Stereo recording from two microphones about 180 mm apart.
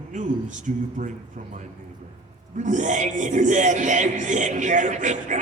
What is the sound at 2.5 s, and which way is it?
Speech, 45° right (ahead or behind).